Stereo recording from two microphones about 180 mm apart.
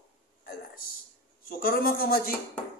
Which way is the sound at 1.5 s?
55° left (ahead or behind).